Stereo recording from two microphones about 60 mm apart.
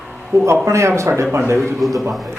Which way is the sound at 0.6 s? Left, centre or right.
Right.